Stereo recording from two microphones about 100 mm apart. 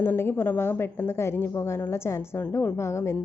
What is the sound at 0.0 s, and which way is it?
A woman's voice, 20° left (ahead or behind).